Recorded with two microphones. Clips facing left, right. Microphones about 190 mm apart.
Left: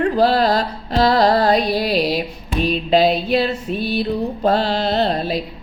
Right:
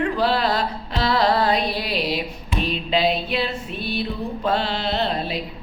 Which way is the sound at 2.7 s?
40° left (ahead or behind).